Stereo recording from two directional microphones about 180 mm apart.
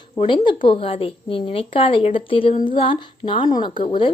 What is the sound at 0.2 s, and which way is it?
A woman's voice, 25° left (ahead or behind).